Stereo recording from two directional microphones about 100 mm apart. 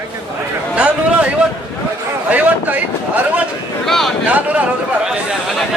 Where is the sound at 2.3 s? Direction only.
15° right (ahead or behind).